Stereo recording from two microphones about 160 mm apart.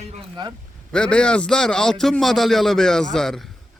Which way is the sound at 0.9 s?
5° left (ahead or behind).